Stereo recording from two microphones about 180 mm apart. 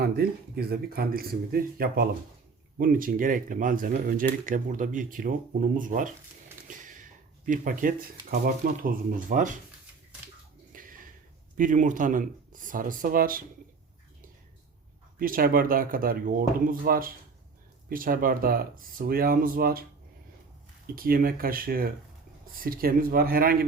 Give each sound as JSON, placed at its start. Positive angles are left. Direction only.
{"t": 0.0, "sound": "speech", "side_deg": -60}
{"t": 10.7, "sound": "bathtub", "side_deg": -50}
{"t": 11.5, "sound": "speech", "side_deg": -45}
{"t": 15.2, "sound": "speech", "side_deg": -50}
{"t": 20.8, "sound": "speech", "side_deg": -55}